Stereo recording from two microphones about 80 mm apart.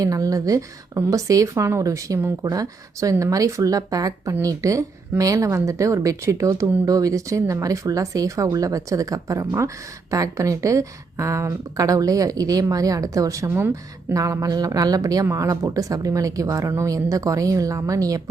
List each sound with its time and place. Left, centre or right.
0.0 s speech: right
13.5 s speech: right
14.2 s speech: right